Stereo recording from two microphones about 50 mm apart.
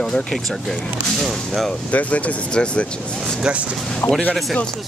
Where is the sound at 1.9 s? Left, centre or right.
Left.